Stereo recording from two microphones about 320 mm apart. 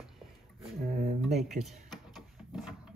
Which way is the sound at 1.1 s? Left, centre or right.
Centre.